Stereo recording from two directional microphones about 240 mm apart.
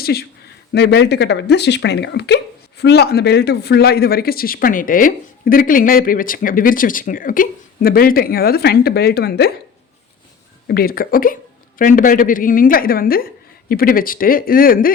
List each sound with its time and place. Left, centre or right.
0.0 s speech: left
10.7 s speech: left